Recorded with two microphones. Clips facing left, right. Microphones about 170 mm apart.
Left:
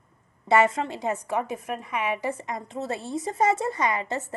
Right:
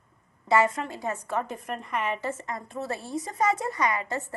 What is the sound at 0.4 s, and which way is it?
A woman's voice, 25° left (ahead or behind).